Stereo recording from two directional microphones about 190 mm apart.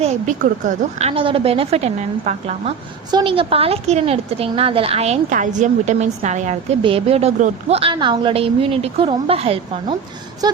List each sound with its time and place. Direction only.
0.0 s a woman's voice: 35° right (ahead or behind)
3.1 s a woman's voice: 25° right (ahead or behind)
10.4 s a sound: 20° right (ahead or behind)